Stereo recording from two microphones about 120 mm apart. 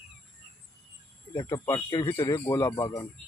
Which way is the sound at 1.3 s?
25° left (ahead or behind).